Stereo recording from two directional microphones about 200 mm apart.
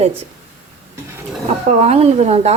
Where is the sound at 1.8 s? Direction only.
30° right (ahead or behind).